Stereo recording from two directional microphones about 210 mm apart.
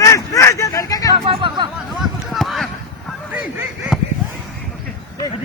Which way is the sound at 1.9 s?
Centre (ahead or behind).